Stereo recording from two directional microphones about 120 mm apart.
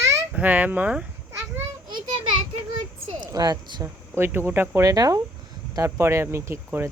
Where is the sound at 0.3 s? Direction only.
15° right (ahead or behind).